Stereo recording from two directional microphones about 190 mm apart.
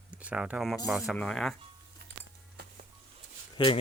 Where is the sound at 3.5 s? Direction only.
25° left (ahead or behind).